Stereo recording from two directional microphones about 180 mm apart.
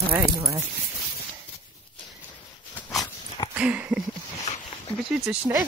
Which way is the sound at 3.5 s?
10° right (ahead or behind).